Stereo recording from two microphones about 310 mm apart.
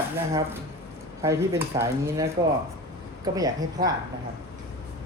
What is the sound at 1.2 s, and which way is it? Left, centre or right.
Speech, centre.